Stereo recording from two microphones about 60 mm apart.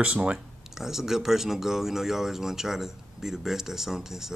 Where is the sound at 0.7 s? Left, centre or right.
Centre.